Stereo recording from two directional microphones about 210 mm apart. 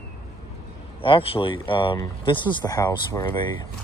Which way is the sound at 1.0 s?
25° left (ahead or behind).